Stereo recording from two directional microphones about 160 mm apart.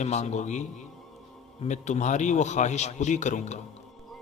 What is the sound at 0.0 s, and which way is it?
A man's voice, 45° left (ahead or behind).